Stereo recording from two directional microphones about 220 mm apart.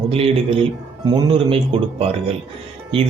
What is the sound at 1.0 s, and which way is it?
Speech, 20° right (ahead or behind).